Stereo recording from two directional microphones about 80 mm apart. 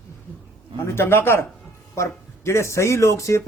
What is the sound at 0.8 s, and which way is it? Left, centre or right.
A man's voice, left.